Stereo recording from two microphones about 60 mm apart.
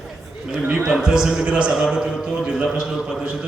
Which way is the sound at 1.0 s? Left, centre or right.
Centre.